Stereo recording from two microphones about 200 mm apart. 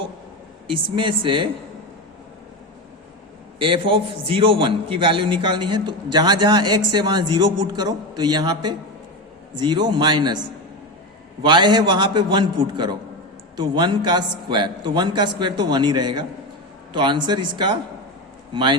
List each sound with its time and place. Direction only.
0.7 s a man's voice: 25° right (ahead or behind)
3.6 s a man's voice: 25° right (ahead or behind)
11.4 s a man's voice: 20° right (ahead or behind)